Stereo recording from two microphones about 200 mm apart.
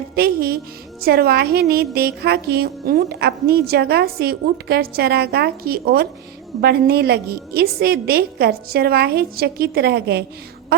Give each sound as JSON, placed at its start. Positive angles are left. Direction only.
{"t": 0.2, "sound": "speech", "side_deg": -50}